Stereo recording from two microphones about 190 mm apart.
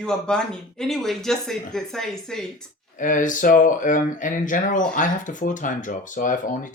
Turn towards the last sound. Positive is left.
turn(degrees=45)  # may be behind; listen again after turning